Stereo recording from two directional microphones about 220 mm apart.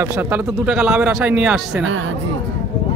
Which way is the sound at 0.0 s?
10° right (ahead or behind).